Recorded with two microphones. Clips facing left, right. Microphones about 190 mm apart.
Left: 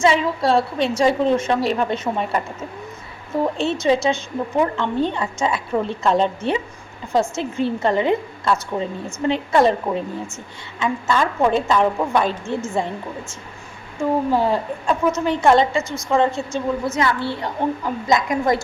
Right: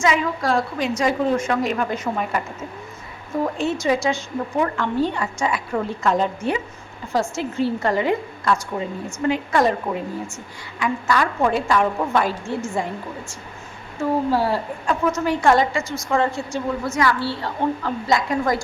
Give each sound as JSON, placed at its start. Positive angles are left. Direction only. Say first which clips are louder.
{"t": 0.0, "sound": "a woman's voice", "louder": "left 3 dB", "side_deg": 30}
{"t": 3.4, "sound": "a woman's voice", "louder": "left 2 dB", "side_deg": 25}